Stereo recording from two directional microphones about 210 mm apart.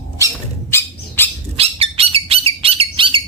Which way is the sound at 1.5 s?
25° right (ahead or behind).